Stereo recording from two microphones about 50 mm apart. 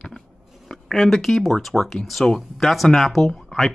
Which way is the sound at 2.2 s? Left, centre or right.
Centre.